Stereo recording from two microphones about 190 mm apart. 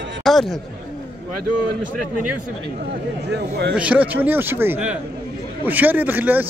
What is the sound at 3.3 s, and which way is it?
Speech, 60° right (ahead or behind).